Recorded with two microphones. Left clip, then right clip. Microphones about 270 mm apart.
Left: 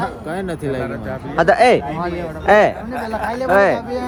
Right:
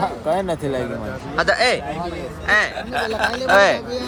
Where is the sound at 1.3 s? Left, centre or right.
Centre.